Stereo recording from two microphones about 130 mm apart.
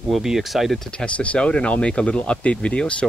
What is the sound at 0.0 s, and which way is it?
Speech, 5° right (ahead or behind).